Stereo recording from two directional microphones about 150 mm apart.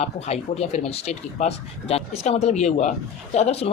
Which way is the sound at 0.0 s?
45° left (ahead or behind).